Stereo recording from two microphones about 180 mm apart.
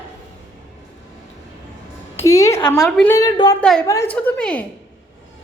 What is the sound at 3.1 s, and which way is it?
Speech, 20° left (ahead or behind).